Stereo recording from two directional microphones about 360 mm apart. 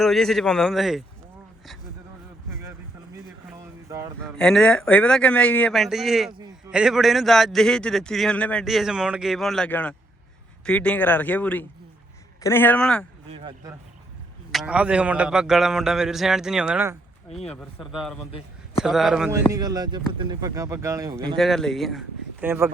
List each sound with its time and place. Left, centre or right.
0.0 s a man's voice: centre
3.8 s a man's voice: centre
4.2 s a man's voice: centre
14.5 s a man's voice: centre
18.3 s a man's voice: centre
18.8 s a man's voice: centre